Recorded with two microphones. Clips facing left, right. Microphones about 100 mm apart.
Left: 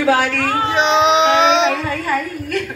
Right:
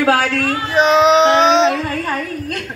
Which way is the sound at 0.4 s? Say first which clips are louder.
Left 1 dB; 30° left (ahead or behind).